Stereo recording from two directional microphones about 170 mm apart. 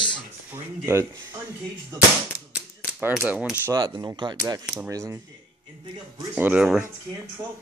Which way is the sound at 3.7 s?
25° right (ahead or behind).